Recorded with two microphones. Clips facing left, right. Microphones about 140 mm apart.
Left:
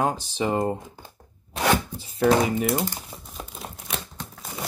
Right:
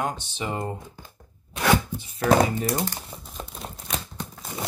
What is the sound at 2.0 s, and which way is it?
Music, 25° left (ahead or behind).